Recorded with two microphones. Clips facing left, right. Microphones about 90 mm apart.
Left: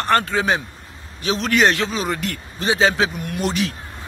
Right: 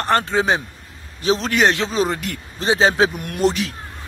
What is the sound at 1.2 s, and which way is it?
Speech, 30° right (ahead or behind).